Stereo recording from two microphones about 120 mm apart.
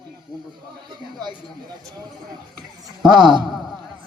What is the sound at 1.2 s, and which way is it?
Speech, 35° right (ahead or behind).